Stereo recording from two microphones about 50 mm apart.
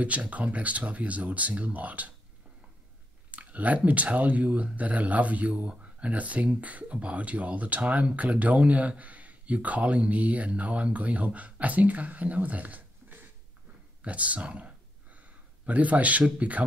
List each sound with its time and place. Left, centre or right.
0.0 s speech: right
3.3 s speech: right